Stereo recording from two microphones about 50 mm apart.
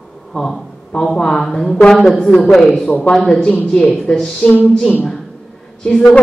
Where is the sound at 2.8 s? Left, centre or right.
Left.